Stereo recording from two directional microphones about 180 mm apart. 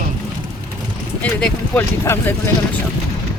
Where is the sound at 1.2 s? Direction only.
10° left (ahead or behind).